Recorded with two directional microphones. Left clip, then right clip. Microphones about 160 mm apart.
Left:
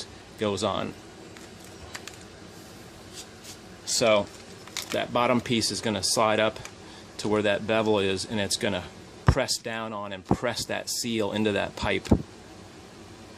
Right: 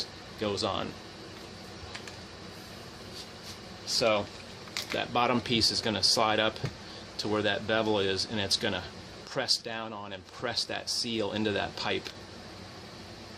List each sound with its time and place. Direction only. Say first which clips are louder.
0.3 s speech: left 4 dB; 35° left (ahead or behind)
4.7 s speech: left 3 dB; 30° left (ahead or behind)